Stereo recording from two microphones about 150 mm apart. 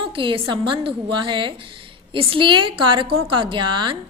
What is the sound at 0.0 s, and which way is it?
A woman's voice, 35° right (ahead or behind).